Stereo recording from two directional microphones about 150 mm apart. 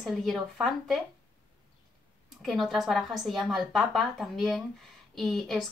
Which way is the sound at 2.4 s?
Centre (ahead or behind).